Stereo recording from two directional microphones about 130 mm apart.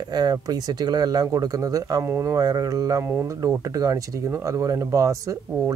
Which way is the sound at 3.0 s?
15° right (ahead or behind).